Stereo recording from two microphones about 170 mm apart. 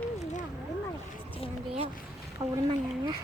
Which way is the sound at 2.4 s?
20° right (ahead or behind).